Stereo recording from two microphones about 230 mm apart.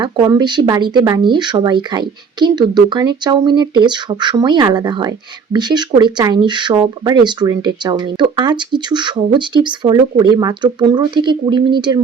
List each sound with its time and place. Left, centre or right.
0.0 s speech: centre